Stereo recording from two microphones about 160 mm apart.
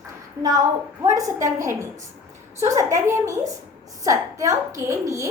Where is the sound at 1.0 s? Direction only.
20° right (ahead or behind).